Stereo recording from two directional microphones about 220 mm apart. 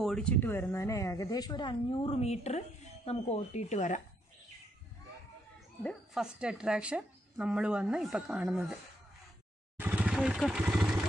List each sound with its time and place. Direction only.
0.0 s a woman's voice: 5° left (ahead or behind); by 4.0 s 30° left (ahead or behind)
5.8 s speech: centre (ahead or behind)
9.8 s vehicle: 5° right (ahead or behind)